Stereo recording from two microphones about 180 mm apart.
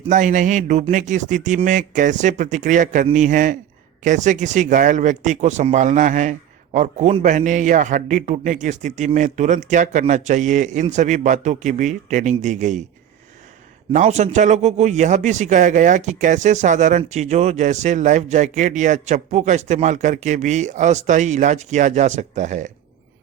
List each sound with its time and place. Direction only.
0.1 s a man's voice: 45° right (ahead or behind)
13.9 s a man's voice: 40° right (ahead or behind)